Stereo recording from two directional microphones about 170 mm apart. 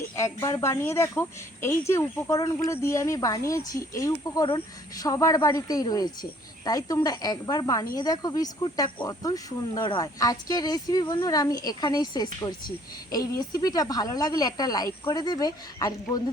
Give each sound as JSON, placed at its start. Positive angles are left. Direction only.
{"t": 0.2, "sound": "speech", "side_deg": 15}